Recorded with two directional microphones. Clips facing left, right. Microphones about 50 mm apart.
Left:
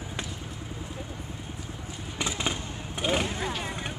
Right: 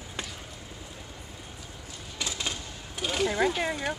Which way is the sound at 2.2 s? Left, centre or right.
Left.